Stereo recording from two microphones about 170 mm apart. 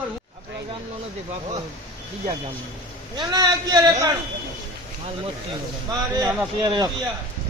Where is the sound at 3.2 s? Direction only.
25° right (ahead or behind).